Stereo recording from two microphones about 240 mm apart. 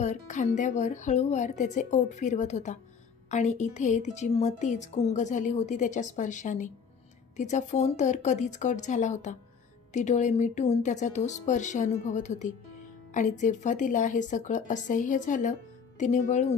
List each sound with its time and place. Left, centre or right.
0.0 s a woman's voice: left